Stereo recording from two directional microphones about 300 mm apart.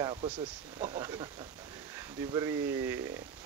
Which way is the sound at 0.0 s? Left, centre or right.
Centre.